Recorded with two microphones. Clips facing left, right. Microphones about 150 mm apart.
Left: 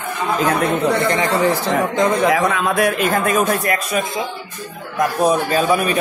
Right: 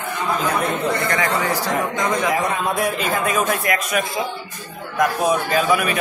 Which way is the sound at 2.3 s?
90° left.